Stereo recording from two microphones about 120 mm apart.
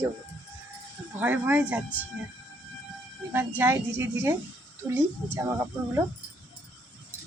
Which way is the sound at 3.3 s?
20° right (ahead or behind).